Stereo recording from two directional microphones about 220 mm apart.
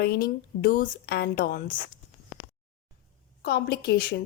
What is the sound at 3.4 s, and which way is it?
Speech, 45° left (ahead or behind).